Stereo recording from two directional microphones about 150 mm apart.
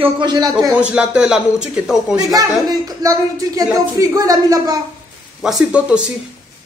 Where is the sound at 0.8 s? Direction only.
5° right (ahead or behind).